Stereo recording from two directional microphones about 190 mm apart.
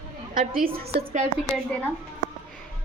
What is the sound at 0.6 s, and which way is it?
Speech, 40° right (ahead or behind).